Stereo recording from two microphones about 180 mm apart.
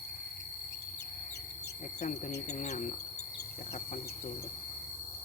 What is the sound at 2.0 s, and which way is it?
Speech, 45° left (ahead or behind).